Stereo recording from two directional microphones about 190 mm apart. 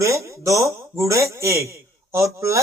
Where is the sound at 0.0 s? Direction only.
15° right (ahead or behind).